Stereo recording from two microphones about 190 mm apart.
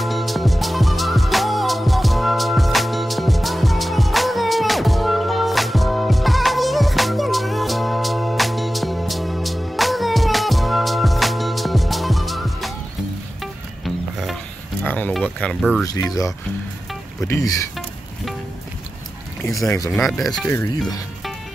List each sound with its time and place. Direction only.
0.0 s music: centre (ahead or behind)
16.1 s speech: 15° left (ahead or behind)
19.4 s speech: centre (ahead or behind)
20.4 s speech: 15° left (ahead or behind)